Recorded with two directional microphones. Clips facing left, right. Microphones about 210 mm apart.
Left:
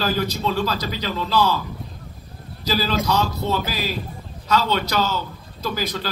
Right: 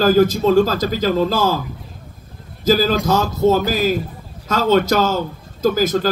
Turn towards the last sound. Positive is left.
turn(degrees=-45)  # may be behind; listen again after turning